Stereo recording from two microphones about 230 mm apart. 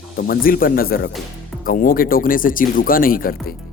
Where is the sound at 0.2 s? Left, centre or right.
Left.